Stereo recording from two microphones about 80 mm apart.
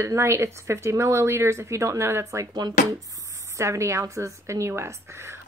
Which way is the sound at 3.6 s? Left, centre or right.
Right.